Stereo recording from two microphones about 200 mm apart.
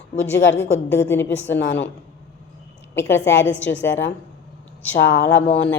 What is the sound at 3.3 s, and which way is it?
A woman's voice, 65° left (ahead or behind).